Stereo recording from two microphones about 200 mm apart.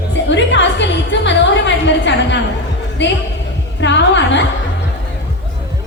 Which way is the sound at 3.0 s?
60° left (ahead or behind).